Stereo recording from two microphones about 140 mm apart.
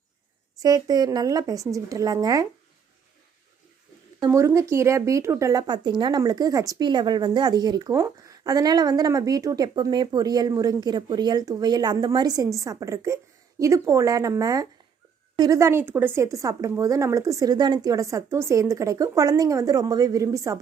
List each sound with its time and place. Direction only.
0.6 s speech: 30° right (ahead or behind)
4.3 s speech: 20° right (ahead or behind)